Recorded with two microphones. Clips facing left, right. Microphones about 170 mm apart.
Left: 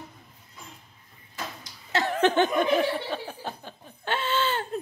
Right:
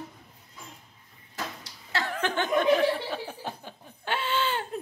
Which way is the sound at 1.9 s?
20° left (ahead or behind).